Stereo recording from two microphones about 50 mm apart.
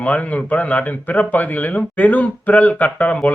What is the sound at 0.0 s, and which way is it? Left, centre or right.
Speech, left.